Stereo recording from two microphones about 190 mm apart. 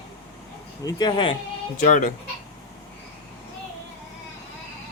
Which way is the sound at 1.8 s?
45° left (ahead or behind).